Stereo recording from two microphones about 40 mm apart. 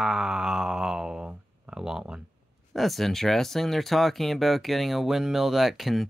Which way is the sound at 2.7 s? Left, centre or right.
Centre.